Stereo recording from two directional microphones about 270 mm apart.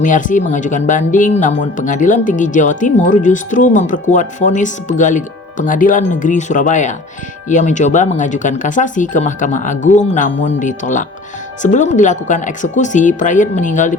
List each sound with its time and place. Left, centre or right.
0.0 s speech: left